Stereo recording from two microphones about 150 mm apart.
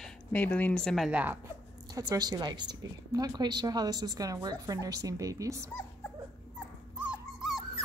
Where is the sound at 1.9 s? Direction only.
25° right (ahead or behind).